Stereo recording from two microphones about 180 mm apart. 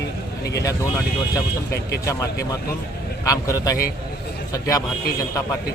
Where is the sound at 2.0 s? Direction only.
20° left (ahead or behind).